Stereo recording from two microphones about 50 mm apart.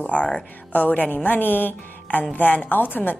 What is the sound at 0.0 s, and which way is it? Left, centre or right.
A woman's voice, left.